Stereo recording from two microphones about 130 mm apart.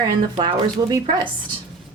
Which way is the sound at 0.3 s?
35° right (ahead or behind).